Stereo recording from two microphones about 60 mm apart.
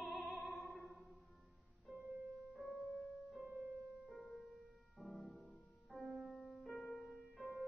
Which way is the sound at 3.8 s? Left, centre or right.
Right.